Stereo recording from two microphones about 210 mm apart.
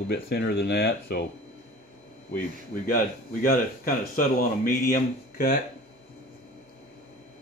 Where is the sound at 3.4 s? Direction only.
40° left (ahead or behind).